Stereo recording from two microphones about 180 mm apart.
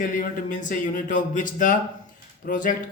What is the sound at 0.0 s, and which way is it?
Speech, 50° left (ahead or behind).